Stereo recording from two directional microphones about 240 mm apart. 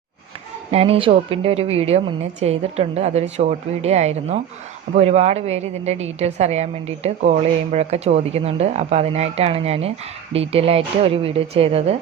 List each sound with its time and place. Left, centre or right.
0.7 s a woman's voice: right